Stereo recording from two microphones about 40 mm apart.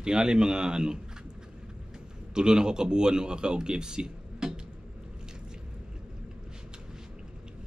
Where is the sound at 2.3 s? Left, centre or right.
Centre.